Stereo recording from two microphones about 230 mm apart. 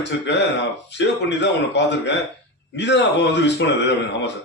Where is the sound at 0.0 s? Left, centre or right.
Left.